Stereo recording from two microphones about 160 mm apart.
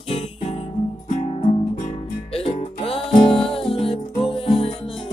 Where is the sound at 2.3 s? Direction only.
35° left (ahead or behind).